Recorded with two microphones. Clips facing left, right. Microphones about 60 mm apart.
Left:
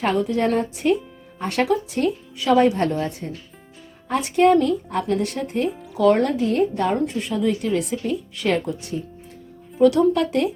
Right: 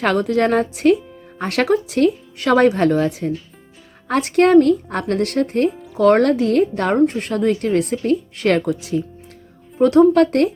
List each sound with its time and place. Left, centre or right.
0.0 s a woman's voice: right
4.1 s speech: right
6.1 s a woman's voice: right
6.9 s speech: right
9.8 s speech: right
10.2 s speech: right